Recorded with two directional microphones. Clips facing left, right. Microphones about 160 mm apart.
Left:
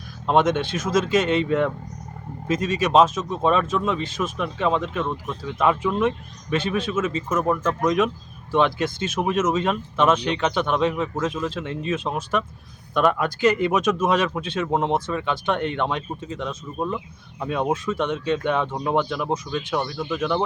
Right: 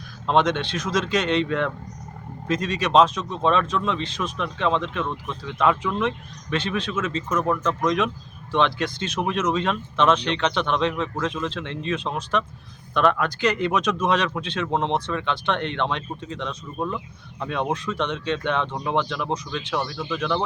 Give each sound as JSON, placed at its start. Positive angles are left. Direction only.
{"t": 0.3, "sound": "speech", "side_deg": 5}
{"t": 0.6, "sound": "speech", "side_deg": 50}
{"t": 0.9, "sound": "speech", "side_deg": 5}